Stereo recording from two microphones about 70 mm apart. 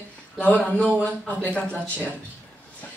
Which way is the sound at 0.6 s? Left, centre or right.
Centre.